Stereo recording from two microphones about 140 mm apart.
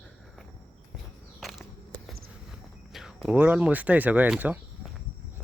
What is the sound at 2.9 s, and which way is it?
Speech, centre (ahead or behind).